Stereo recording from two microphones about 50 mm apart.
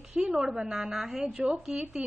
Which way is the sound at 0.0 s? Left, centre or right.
Centre.